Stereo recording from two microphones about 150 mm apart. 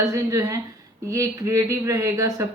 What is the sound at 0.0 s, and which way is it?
Speech, 20° right (ahead or behind).